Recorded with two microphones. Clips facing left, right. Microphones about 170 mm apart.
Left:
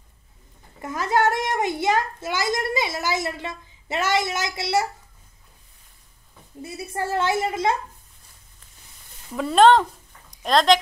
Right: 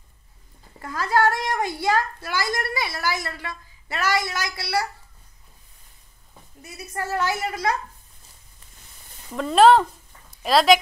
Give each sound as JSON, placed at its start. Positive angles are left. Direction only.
{"t": 0.7, "sound": "a child's voice", "side_deg": 20}
{"t": 6.6, "sound": "a child's voice", "side_deg": 25}
{"t": 9.3, "sound": "speech", "side_deg": 0}